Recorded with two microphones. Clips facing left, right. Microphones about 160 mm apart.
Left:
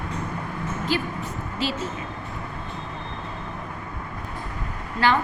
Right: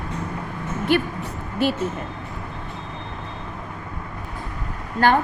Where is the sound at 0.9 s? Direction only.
60° right (ahead or behind).